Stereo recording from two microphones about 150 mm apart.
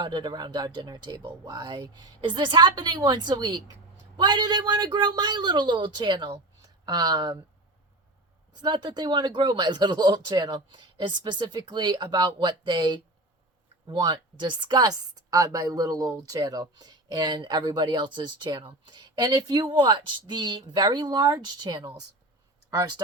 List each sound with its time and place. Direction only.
0.0 s speech: 30° right (ahead or behind)
8.6 s speech: 30° right (ahead or behind)